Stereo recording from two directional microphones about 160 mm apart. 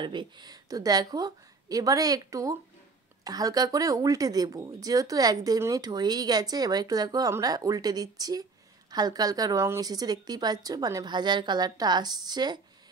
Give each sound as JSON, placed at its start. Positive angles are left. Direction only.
{"t": 0.0, "sound": "speech", "side_deg": -30}